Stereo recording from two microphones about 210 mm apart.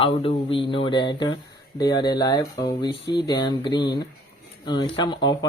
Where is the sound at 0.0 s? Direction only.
25° left (ahead or behind).